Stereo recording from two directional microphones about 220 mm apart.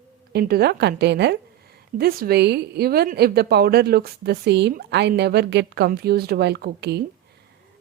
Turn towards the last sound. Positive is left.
turn(degrees=-45)  # may be behind; listen again after turning